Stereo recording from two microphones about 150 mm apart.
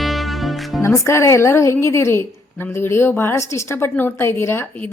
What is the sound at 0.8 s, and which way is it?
A woman's voice, 20° left (ahead or behind).